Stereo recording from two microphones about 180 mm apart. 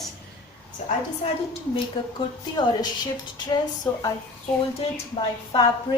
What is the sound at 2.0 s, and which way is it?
Speech, 25° left (ahead or behind).